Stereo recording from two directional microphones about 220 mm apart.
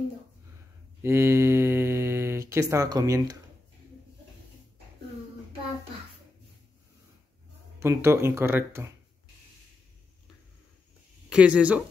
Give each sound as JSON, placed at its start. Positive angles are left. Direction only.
{"t": 1.0, "sound": "mantra", "side_deg": -10}
{"t": 2.7, "sound": "speech", "side_deg": -15}
{"t": 7.8, "sound": "speech", "side_deg": -10}
{"t": 11.2, "sound": "speech", "side_deg": -5}